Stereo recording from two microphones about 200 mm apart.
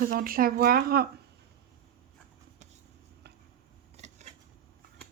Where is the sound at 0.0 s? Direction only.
45° right (ahead or behind).